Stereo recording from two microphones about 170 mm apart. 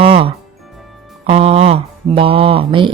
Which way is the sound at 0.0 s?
35° right (ahead or behind).